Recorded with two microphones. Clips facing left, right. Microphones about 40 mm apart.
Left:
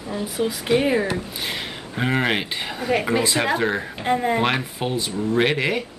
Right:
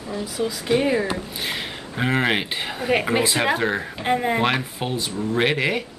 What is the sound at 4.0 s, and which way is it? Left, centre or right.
Speech, centre.